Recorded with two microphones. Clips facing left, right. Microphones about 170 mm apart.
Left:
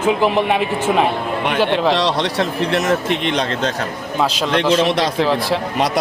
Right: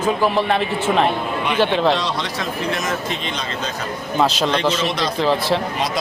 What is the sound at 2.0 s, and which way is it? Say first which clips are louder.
A man's voice: left 6 dB; 80° left.